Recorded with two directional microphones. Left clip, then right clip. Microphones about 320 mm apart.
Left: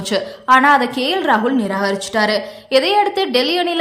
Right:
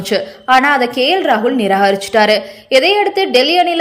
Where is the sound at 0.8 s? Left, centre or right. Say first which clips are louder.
Right 5 dB; left.